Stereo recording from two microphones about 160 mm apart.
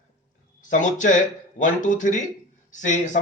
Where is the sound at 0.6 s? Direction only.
55° left (ahead or behind).